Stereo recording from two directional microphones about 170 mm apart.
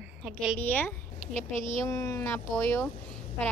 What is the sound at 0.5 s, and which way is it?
Speech, 10° left (ahead or behind).